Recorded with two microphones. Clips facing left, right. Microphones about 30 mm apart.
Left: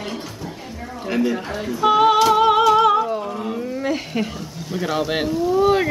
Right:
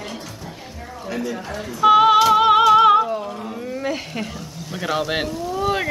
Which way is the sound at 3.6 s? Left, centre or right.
Centre.